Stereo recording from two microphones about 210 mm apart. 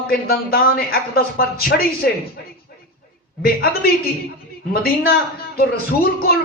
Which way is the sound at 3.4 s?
45° left (ahead or behind).